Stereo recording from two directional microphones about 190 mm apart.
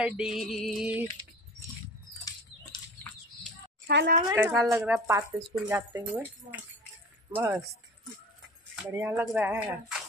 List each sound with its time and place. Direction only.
0.0 s music: 5° right (ahead or behind)
3.8 s a woman's voice: 55° right (ahead or behind)
4.3 s speech: 10° right (ahead or behind)
7.3 s speech: 10° right (ahead or behind)
8.9 s speech: 10° right (ahead or behind)